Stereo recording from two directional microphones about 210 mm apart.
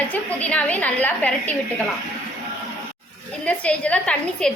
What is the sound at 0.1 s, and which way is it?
A woman's voice, 5° left (ahead or behind).